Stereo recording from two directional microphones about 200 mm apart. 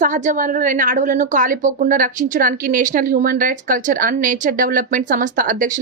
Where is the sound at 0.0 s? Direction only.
40° right (ahead or behind).